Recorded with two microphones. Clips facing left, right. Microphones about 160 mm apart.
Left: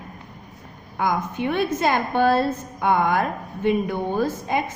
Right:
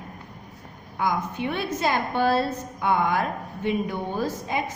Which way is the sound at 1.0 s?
50° left (ahead or behind).